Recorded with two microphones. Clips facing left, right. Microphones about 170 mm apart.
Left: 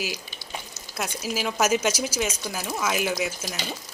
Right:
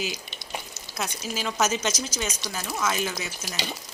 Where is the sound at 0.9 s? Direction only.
5° left (ahead or behind).